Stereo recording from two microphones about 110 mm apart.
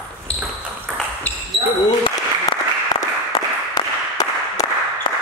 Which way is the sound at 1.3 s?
15° left (ahead or behind).